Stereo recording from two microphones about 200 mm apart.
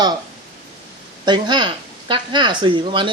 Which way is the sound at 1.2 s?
20° right (ahead or behind).